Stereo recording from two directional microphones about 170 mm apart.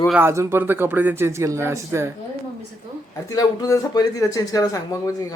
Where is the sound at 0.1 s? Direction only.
15° right (ahead or behind).